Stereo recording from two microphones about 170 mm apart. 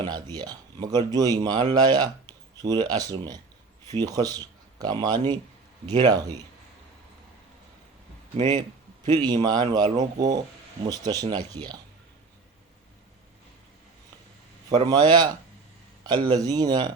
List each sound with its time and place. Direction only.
0.0 s speech: 25° right (ahead or behind)
9.1 s speech: 25° right (ahead or behind)
14.8 s speech: 25° right (ahead or behind)